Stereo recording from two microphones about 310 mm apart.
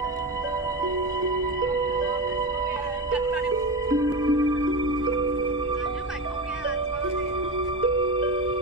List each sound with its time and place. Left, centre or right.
1.6 s music: centre
3.1 s music: centre
7.8 s music: centre